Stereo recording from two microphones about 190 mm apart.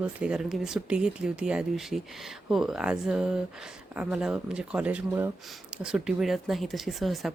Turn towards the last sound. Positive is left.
turn(degrees=0)  # may be behind; listen again after turning